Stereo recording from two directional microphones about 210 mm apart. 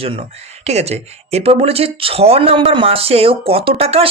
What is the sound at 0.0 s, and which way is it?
Speech, 30° right (ahead or behind).